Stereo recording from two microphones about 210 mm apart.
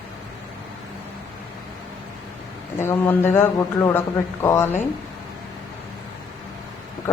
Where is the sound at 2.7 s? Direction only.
10° left (ahead or behind).